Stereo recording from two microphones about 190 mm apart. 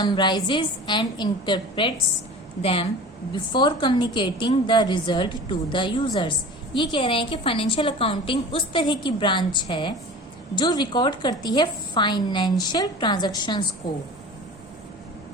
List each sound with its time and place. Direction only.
0.0 s a woman's voice: 25° left (ahead or behind)